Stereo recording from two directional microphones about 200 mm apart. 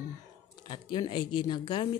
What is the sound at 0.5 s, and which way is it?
Speech, 25° left (ahead or behind).